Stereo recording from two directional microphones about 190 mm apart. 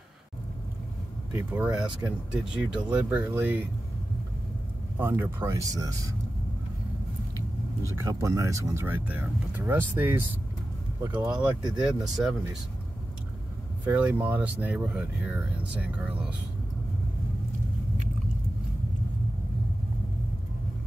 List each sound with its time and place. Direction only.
1.3 s speech: 15° right (ahead or behind)
4.9 s speech: 10° right (ahead or behind)
7.8 s speech: 15° right (ahead or behind)
11.2 s speech: 5° right (ahead or behind)
13.8 s speech: 10° right (ahead or behind)